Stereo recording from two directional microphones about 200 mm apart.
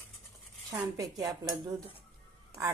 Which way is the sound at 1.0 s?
20° right (ahead or behind).